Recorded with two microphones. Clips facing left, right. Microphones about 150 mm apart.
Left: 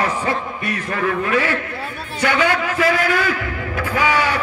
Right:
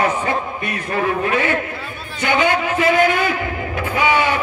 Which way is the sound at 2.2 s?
25° right (ahead or behind).